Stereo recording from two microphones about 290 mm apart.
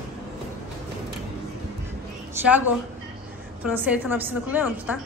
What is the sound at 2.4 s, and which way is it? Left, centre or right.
A woman's voice, centre.